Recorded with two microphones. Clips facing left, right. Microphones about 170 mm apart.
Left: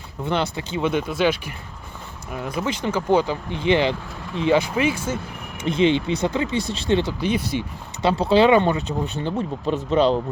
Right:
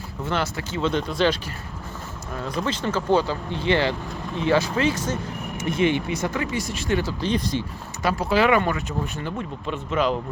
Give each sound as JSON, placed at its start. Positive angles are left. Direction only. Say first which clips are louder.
{"t": 0.2, "sound": "speech", "louder": "left 3 dB", "side_deg": 15}
{"t": 5.6, "sound": "speech", "louder": "left 3 dB", "side_deg": 20}
{"t": 7.2, "sound": "speech", "louder": "left 1 dB", "side_deg": 10}
{"t": 8.0, "sound": "speech", "louder": "left 4 dB", "side_deg": 30}